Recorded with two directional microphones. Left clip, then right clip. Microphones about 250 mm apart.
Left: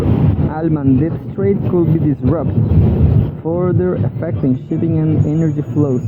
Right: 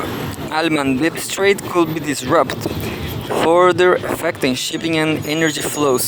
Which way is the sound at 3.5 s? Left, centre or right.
Right.